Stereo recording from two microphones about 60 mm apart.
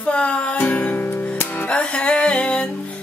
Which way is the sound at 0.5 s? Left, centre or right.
Left.